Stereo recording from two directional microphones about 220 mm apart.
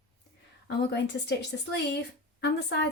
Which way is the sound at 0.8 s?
50° left (ahead or behind).